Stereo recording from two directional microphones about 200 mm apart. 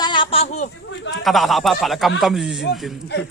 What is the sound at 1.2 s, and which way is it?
Speech, centre (ahead or behind).